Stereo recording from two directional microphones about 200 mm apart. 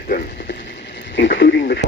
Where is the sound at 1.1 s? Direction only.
65° left (ahead or behind).